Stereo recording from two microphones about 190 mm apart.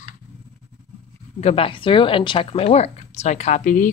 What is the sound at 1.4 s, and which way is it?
Speech, 30° left (ahead or behind).